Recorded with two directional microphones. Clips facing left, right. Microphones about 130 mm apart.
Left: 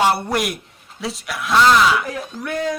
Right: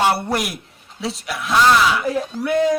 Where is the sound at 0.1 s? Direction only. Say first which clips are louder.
Left 1 dB; centre (ahead or behind).